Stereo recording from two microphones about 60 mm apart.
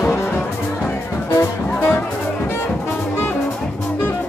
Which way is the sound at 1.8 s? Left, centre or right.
Left.